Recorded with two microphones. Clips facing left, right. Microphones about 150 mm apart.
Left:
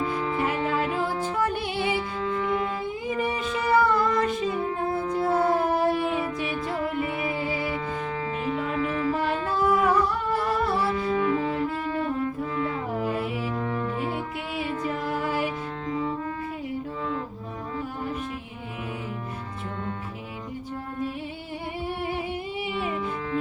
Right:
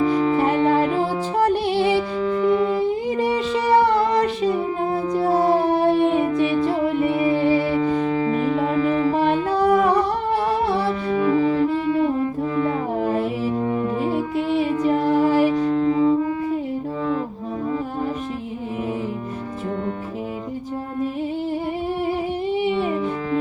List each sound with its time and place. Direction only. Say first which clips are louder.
0.1 s music: right 8 dB; 30° right (ahead or behind)
4.8 s music: right 5 dB; 15° right (ahead or behind)
5.5 s a sound: right 6 dB; 35° right (ahead or behind)
7.2 s music: right 10 dB; 35° right (ahead or behind)
11.9 s music: right 7 dB; 15° right (ahead or behind)
12.4 s music: right 7 dB; 30° right (ahead or behind)
14.8 s music: right 12 dB; 35° right (ahead or behind)
15.9 s wind instrument: right 9 dB; 25° right (ahead or behind)
22.6 s music: right 6 dB; 30° right (ahead or behind)